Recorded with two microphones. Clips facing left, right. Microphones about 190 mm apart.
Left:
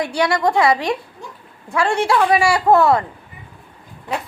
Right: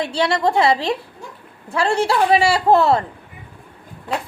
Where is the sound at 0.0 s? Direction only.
25° right (ahead or behind).